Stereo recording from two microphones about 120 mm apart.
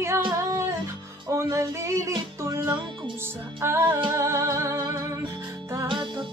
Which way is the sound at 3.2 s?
20° right (ahead or behind).